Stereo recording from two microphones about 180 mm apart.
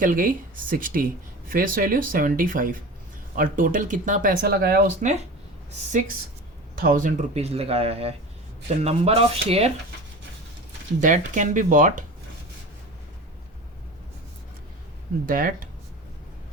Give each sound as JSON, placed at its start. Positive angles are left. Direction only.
{"t": 0.0, "sound": "speech", "side_deg": -50}
{"t": 6.7, "sound": "speech", "side_deg": -50}
{"t": 11.0, "sound": "speech", "side_deg": -45}
{"t": 15.3, "sound": "speech", "side_deg": -50}